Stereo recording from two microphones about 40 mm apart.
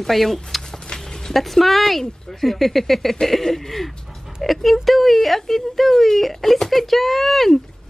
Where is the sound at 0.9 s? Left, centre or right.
Centre.